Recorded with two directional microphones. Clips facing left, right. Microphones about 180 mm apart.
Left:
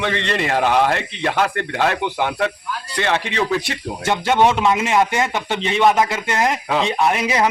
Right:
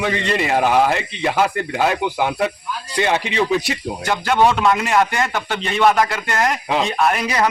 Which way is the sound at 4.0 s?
25° left (ahead or behind).